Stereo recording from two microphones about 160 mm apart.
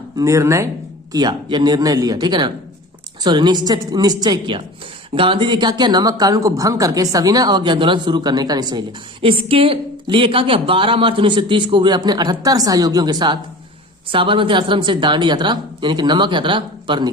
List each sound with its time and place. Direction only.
0.2 s a woman's voice: 20° right (ahead or behind)